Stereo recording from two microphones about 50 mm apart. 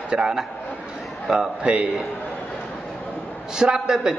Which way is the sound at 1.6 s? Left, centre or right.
Right.